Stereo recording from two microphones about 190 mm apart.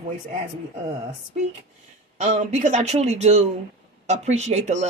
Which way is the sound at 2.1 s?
35° right (ahead or behind).